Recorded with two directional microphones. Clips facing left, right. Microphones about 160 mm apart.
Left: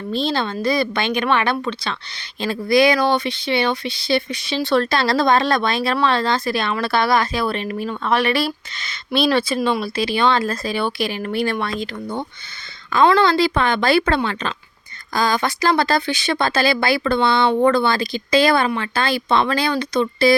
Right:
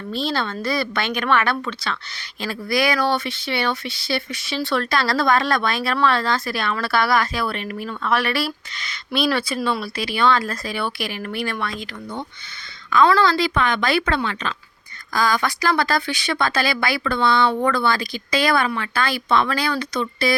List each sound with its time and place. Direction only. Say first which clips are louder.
0.1 s speech: left 3 dB; 20° left (ahead or behind)